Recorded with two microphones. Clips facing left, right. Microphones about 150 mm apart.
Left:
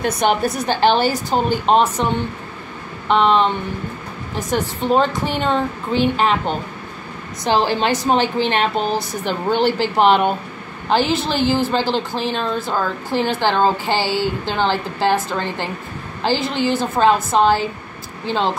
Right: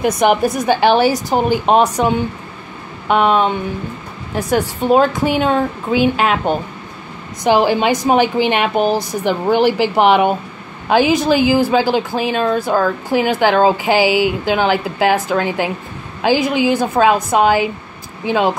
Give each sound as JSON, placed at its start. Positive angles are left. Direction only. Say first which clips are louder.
{"t": 0.0, "sound": "a woman's voice", "louder": "right 4 dB", "side_deg": -10}
{"t": 4.4, "sound": "a woman's voice", "louder": "right 4 dB", "side_deg": -10}
{"t": 7.4, "sound": "a woman's voice", "louder": "right 4 dB", "side_deg": -10}